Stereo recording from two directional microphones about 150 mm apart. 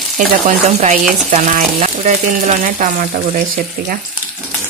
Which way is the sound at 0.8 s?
50° right (ahead or behind).